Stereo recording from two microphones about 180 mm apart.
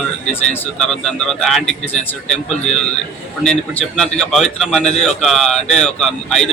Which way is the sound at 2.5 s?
40° left (ahead or behind).